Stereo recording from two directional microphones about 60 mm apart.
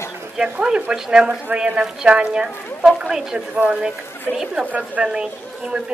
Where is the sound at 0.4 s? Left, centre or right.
Centre.